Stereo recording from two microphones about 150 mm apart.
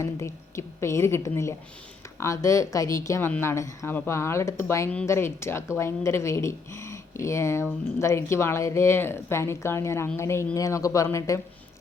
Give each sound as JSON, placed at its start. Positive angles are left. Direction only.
{"t": 0.0, "sound": "a woman's voice", "side_deg": 20}